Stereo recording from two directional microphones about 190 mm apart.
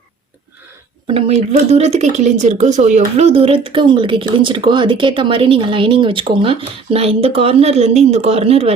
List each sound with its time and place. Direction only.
1.0 s a woman's voice: 30° right (ahead or behind)